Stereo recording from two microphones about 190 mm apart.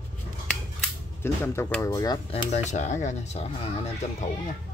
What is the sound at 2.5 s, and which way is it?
Speech, 40° left (ahead or behind).